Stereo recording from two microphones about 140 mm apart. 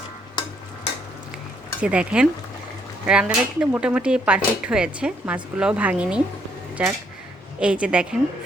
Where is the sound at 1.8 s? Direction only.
5° right (ahead or behind).